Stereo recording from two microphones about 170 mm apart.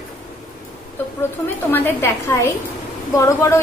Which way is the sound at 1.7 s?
15° left (ahead or behind).